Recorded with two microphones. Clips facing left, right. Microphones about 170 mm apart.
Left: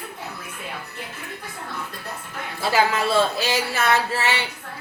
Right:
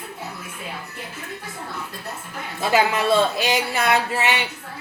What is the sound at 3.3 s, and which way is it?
A woman's voice, 15° right (ahead or behind).